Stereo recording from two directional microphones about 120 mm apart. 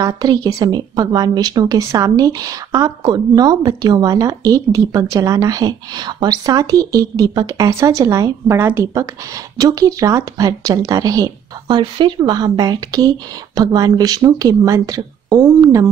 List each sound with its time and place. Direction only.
0.0 s a woman's voice: 35° right (ahead or behind)